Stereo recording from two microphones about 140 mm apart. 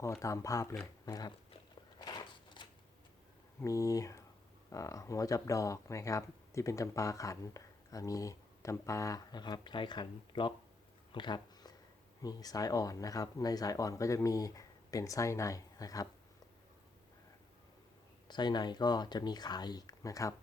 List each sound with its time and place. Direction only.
0.0 s speech: 20° left (ahead or behind)
2.0 s a sound: 30° left (ahead or behind)
3.6 s speech: 25° left (ahead or behind)
11.1 s a sound: 35° left (ahead or behind)
12.2 s speech: 25° left (ahead or behind)
18.3 s speech: 30° left (ahead or behind)